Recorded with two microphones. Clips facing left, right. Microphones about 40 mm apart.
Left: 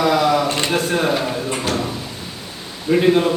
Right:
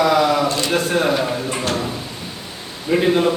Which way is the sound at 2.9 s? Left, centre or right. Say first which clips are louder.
Left 1 dB; centre.